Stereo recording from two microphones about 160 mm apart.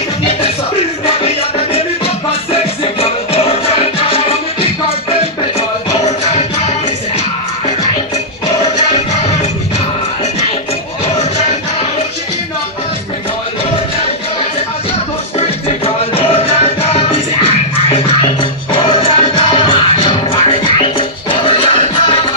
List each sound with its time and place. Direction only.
1.2 s music: 35° left (ahead or behind)
15.3 s music: 35° left (ahead or behind)